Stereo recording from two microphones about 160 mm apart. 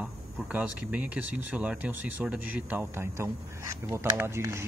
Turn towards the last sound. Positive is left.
turn(degrees=-15)  # may be behind; listen again after turning